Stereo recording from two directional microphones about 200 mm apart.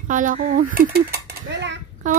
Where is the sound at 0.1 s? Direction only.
40° right (ahead or behind); by 1.8 s 60° right (ahead or behind).